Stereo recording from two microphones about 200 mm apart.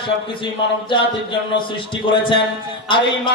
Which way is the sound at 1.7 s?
25° left (ahead or behind).